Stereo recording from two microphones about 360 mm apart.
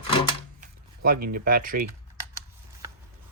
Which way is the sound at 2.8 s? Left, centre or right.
Centre.